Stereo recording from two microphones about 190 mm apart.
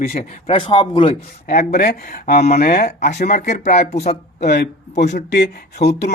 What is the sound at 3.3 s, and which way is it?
Speech, 40° left (ahead or behind).